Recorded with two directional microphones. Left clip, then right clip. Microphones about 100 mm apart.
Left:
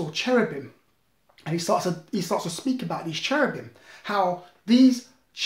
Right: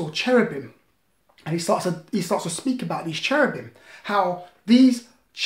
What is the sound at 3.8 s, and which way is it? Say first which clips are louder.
Speech: right 2 dB; 5° right (ahead or behind).